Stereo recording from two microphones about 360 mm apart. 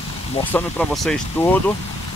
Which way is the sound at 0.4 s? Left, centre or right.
Centre.